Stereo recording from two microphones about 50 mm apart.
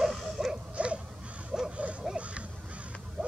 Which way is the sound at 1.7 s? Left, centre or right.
Right.